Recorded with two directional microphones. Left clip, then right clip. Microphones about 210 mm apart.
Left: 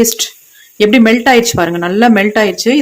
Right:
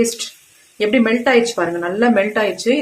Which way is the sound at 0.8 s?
50° left (ahead or behind).